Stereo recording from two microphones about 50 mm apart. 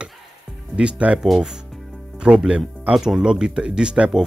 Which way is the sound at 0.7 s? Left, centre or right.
Right.